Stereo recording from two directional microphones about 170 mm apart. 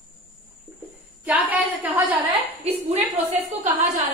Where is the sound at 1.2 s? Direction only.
10° right (ahead or behind).